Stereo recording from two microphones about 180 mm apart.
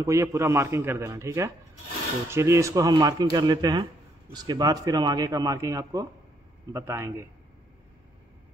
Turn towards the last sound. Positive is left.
turn(degrees=-15)  # may be behind; listen again after turning